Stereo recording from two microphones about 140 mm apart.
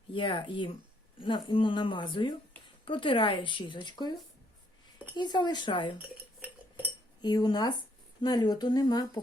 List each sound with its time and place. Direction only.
0.1 s speech: 35° left (ahead or behind)
5.1 s speech: 30° left (ahead or behind)
7.2 s speech: 30° left (ahead or behind)